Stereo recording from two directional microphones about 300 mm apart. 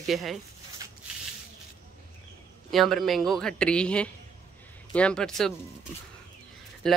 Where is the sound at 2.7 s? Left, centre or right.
Centre.